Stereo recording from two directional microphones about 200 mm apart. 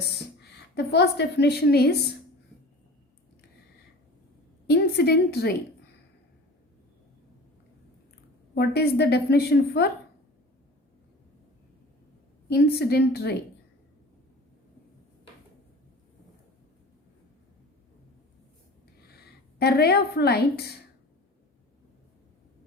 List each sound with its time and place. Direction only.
0.3 s a woman's voice: 55° left (ahead or behind)
4.7 s a woman's voice: 55° left (ahead or behind)
8.5 s a woman's voice: 55° left (ahead or behind)
12.5 s a woman's voice: 55° left (ahead or behind)
19.0 s a woman's voice: 55° left (ahead or behind)